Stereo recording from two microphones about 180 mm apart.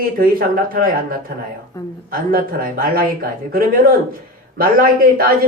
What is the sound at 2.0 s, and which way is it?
Speech, 55° right (ahead or behind).